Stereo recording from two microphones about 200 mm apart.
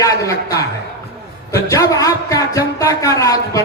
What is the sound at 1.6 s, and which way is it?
A man's voice, 15° left (ahead or behind).